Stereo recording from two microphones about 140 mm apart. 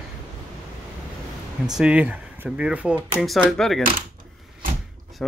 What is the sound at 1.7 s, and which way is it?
Speech, 10° right (ahead or behind).